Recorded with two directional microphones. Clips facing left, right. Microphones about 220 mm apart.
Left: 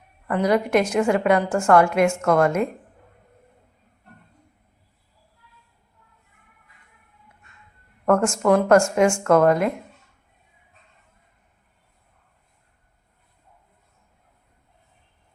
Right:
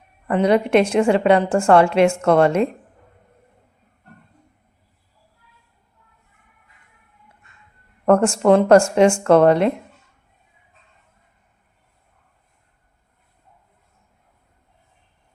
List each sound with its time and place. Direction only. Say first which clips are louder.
0.3 s a woman's voice: right 4 dB; 25° right (ahead or behind)
8.0 s speech: right 4 dB; 30° right (ahead or behind)